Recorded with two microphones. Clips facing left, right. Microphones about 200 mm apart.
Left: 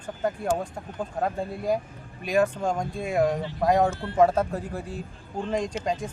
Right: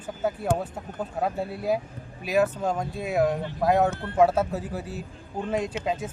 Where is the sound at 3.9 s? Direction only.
55° right (ahead or behind).